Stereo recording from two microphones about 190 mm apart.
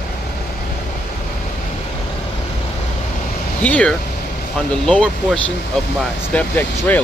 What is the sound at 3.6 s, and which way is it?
Speech, 5° left (ahead or behind).